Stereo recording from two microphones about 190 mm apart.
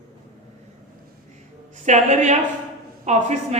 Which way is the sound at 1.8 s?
40° right (ahead or behind).